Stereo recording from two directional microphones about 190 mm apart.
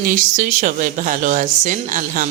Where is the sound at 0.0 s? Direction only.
45° right (ahead or behind).